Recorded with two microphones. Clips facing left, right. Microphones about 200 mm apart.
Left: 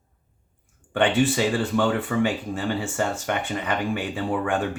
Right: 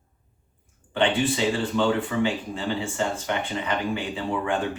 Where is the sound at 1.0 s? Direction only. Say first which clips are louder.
Left 2 dB; 50° left (ahead or behind).